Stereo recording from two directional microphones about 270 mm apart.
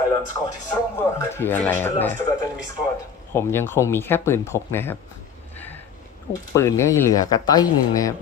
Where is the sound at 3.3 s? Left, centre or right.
Centre.